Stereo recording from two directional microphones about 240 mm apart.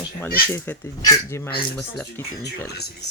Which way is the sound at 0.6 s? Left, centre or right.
Centre.